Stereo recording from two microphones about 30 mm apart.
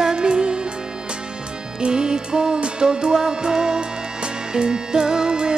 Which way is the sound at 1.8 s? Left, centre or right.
Right.